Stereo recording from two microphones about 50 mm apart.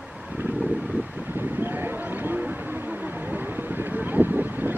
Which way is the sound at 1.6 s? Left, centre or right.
Right.